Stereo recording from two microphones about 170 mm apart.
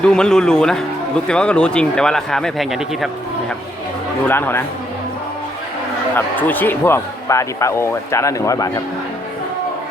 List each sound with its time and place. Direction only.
0.0 s speech: 5° left (ahead or behind)
4.3 s speech: 10° left (ahead or behind)
6.1 s speech: 10° left (ahead or behind)